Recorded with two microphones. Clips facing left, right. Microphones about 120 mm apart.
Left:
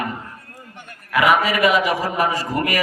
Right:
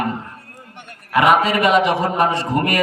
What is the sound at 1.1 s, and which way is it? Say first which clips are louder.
A man's voice: right 3 dB; 30° right (ahead or behind).